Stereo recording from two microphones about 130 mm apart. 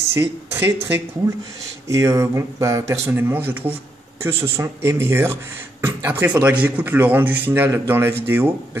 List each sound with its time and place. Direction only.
0.1 s speech: 20° right (ahead or behind)